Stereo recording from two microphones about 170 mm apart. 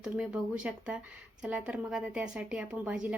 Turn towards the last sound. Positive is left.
turn(degrees=-5)  # may be behind; listen again after turning